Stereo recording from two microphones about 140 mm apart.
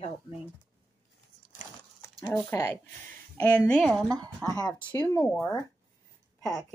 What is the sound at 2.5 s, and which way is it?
Speech, 20° left (ahead or behind).